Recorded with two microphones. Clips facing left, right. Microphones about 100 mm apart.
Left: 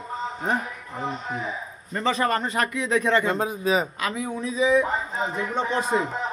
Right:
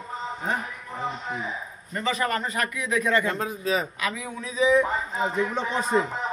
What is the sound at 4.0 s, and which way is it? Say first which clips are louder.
Speech: left 2 dB; 35° left (ahead or behind).